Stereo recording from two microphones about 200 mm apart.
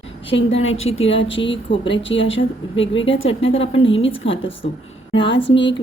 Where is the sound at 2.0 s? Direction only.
70° left (ahead or behind).